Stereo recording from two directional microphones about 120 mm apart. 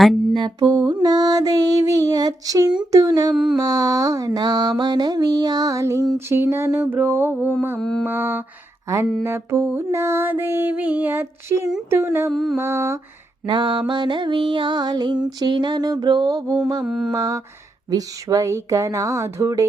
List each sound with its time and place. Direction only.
0.0 s music: centre (ahead or behind)
0.3 s music: 40° right (ahead or behind)
3.3 s mantra: 5° right (ahead or behind)
3.6 s music: 30° right (ahead or behind)
7.8 s mantra: 5° left (ahead or behind)
8.0 s mantra: 15° right (ahead or behind)
9.2 s music: 25° right (ahead or behind)
12.3 s mantra: centre (ahead or behind)
12.5 s music: 20° right (ahead or behind)
13.5 s music: 40° right (ahead or behind)
16.8 s mantra: 5° right (ahead or behind)
17.1 s music: 30° right (ahead or behind)